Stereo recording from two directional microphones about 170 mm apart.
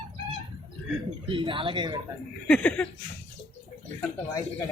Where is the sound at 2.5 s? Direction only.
5° left (ahead or behind).